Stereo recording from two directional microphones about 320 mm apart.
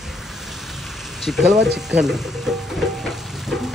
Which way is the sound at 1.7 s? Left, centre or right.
Centre.